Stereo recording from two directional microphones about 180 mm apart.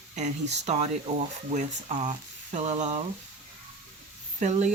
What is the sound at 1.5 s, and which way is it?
Speech, 40° right (ahead or behind).